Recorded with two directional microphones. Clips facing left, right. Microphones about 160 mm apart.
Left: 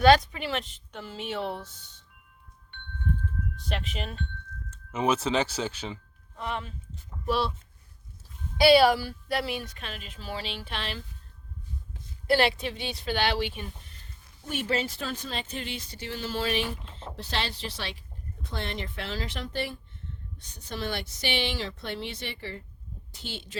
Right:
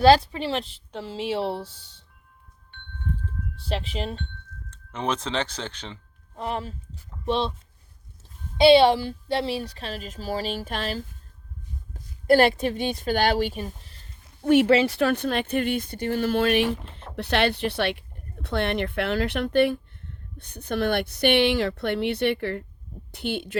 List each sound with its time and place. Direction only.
0.0 s a woman's voice: 30° right (ahead or behind)
3.5 s a woman's voice: 30° right (ahead or behind)
4.7 s speech: 5° left (ahead or behind)
6.3 s speech: 35° right (ahead or behind)
7.3 s speech: 25° right (ahead or behind)
8.5 s a woman's voice: 25° right (ahead or behind); by 11.0 s 40° right (ahead or behind)
12.3 s a woman's voice: 50° right (ahead or behind)
14.4 s speech: 65° right (ahead or behind)